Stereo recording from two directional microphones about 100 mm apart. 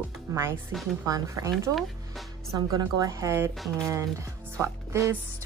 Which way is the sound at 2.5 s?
35° right (ahead or behind).